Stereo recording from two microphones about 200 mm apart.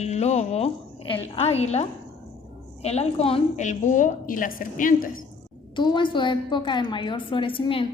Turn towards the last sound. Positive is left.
turn(degrees=25)  # may be behind; listen again after turning